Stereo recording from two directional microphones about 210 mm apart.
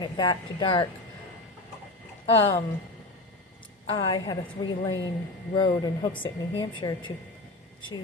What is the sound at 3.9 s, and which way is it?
A woman's voice, 25° left (ahead or behind).